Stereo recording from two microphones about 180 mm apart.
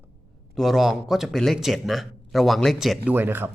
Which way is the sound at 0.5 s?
Centre (ahead or behind).